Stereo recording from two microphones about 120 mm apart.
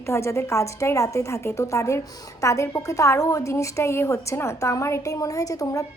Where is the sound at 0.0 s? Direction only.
25° left (ahead or behind).